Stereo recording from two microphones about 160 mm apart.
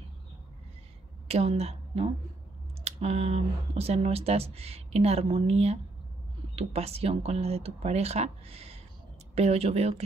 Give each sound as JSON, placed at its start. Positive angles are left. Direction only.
{"t": 1.2, "sound": "speech", "side_deg": -40}